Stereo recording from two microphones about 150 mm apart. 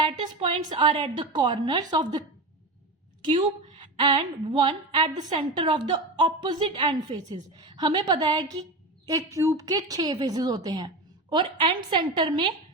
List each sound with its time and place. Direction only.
0.0 s a woman's voice: 35° right (ahead or behind)